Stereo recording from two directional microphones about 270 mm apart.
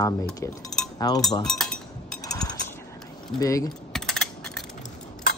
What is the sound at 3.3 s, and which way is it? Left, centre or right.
Speech, centre.